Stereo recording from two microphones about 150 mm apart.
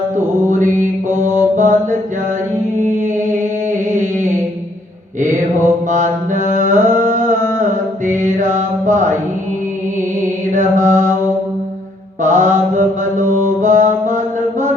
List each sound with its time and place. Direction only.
0.4 s mantra: 55° right (ahead or behind)
2.7 s music: 55° right (ahead or behind)
3.7 s a sound: 55° right (ahead or behind)
5.9 s mantra: 55° right (ahead or behind)
6.7 s carnatic music: 55° right (ahead or behind)
8.0 s mantra: 55° right (ahead or behind)
10.5 s mantra: 55° right (ahead or behind)
12.2 s mantra: 55° right (ahead or behind)